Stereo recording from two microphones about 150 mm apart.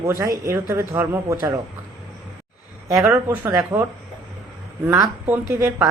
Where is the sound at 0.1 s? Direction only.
20° right (ahead or behind).